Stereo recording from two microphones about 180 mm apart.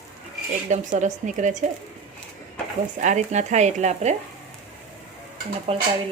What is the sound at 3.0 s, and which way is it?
Speech, 40° right (ahead or behind).